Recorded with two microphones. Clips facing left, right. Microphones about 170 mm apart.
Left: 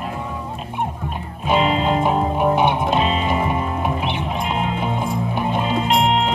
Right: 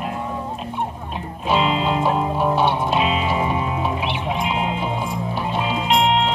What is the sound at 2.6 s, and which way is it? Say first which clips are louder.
Music: left 1 dB; 15° left (ahead or behind).